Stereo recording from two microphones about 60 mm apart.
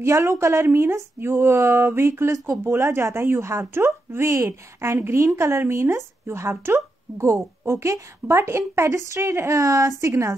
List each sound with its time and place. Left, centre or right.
0.0 s speech: right
2.3 s a woman's voice: right